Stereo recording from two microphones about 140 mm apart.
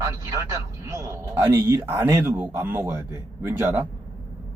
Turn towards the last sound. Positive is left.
turn(degrees=-15)  # may be behind; listen again after turning